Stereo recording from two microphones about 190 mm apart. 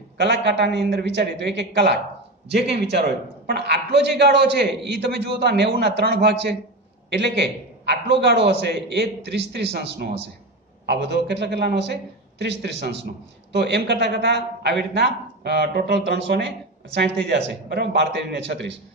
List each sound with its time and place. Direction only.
0.2 s a man's voice: 65° right (ahead or behind)